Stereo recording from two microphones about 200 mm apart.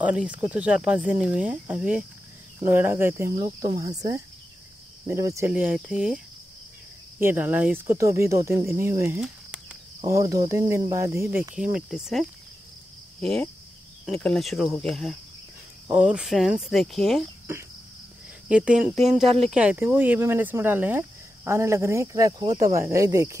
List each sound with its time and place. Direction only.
0.0 s speech: 5° right (ahead or behind)
18.5 s speech: 5° right (ahead or behind)